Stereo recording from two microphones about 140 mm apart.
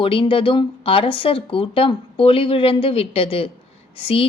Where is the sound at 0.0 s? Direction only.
40° left (ahead or behind).